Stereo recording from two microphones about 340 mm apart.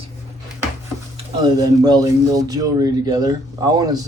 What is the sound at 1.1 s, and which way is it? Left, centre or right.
Speech, centre.